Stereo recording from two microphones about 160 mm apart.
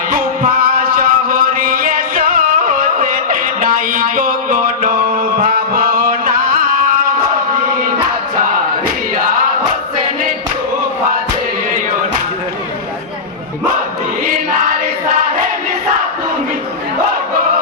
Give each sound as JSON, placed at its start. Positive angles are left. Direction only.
{"t": 0.1, "sound": "music", "side_deg": -60}